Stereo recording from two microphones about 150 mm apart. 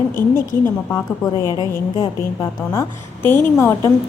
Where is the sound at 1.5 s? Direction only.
30° left (ahead or behind).